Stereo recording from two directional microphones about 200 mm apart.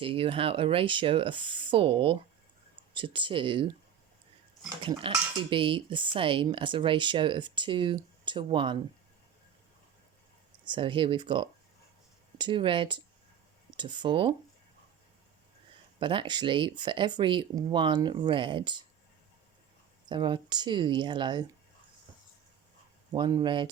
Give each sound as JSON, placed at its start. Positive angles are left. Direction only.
{"t": 0.0, "sound": "speech", "side_deg": -25}
{"t": 4.8, "sound": "speech", "side_deg": -25}
{"t": 10.7, "sound": "speech", "side_deg": -25}
{"t": 16.0, "sound": "speech", "side_deg": -25}
{"t": 20.1, "sound": "speech", "side_deg": -25}
{"t": 23.1, "sound": "speech", "side_deg": -20}